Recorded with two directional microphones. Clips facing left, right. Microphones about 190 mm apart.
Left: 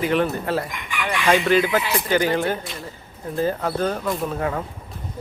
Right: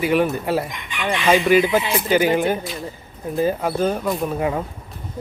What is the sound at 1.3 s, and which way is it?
Speech, 10° right (ahead or behind).